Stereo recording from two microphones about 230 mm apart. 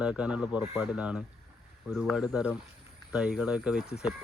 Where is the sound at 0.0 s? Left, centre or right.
Centre.